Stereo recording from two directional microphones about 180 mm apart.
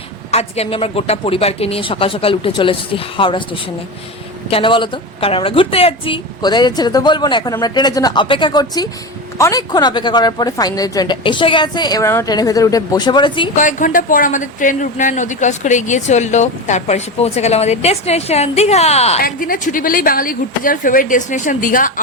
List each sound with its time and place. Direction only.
0.3 s a woman's voice: 35° left (ahead or behind)
13.6 s speech: 45° left (ahead or behind)
19.2 s a woman's voice: 50° left (ahead or behind)